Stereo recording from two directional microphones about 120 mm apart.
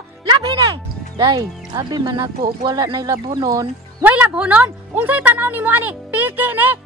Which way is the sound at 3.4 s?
30° right (ahead or behind).